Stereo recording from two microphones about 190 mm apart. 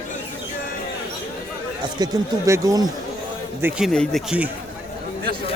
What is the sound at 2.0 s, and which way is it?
Speech, 20° right (ahead or behind).